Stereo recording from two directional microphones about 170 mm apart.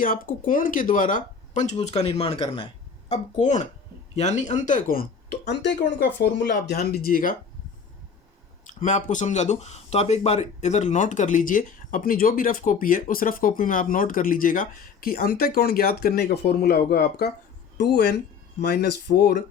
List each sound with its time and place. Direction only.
0.0 s speech: 55° left (ahead or behind)
2.0 s speech: 35° left (ahead or behind)
3.1 s speech: 40° left (ahead or behind)
8.6 s speech: 45° left (ahead or behind); by 19.4 s 75° left (ahead or behind)